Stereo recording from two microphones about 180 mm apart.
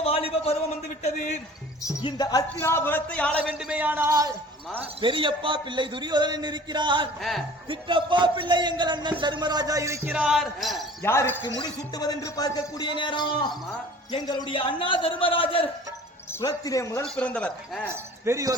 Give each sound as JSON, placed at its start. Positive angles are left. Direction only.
{"t": 0.0, "sound": "a sound", "side_deg": 30}
{"t": 1.0, "sound": "a man's voice", "side_deg": 40}
{"t": 1.8, "sound": "speech", "side_deg": 20}
{"t": 3.4, "sound": "speech", "side_deg": -5}
{"t": 4.9, "sound": "speech", "side_deg": -30}
{"t": 7.2, "sound": "speech", "side_deg": 0}
{"t": 7.7, "sound": "speech", "side_deg": -25}
{"t": 11.0, "sound": "speech", "side_deg": 15}
{"t": 16.3, "sound": "speech", "side_deg": 20}
{"t": 17.2, "sound": "speech", "side_deg": 5}
{"t": 17.9, "sound": "speech", "side_deg": -15}